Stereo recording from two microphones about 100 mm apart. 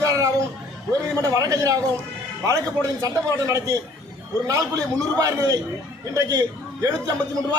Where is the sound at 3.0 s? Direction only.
35° right (ahead or behind).